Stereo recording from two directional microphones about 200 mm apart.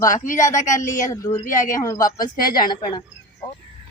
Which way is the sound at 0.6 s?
40° left (ahead or behind).